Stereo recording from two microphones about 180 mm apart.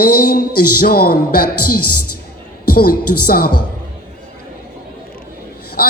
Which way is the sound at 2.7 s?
55° left (ahead or behind).